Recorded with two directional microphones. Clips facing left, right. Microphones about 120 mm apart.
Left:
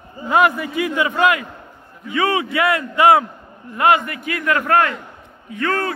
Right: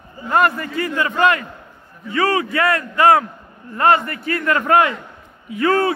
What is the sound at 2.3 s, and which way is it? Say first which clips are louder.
Speech: even; 20° left (ahead or behind).